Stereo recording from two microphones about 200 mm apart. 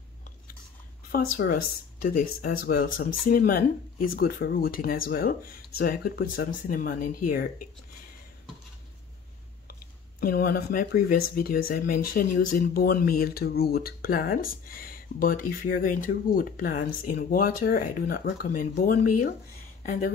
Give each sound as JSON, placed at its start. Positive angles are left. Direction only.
{"t": 1.3, "sound": "speech", "side_deg": 45}
{"t": 10.2, "sound": "speech", "side_deg": 50}